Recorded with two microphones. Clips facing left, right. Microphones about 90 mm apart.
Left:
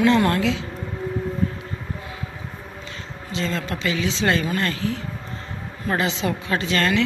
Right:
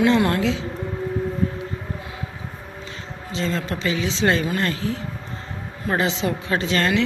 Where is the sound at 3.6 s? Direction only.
25° right (ahead or behind).